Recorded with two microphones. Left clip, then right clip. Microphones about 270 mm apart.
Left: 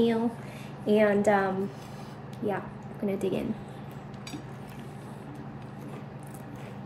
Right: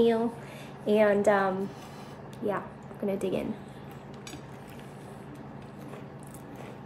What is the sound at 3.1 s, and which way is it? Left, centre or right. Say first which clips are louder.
Speech: even; centre.